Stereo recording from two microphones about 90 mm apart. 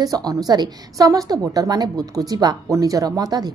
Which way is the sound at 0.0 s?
45° right (ahead or behind).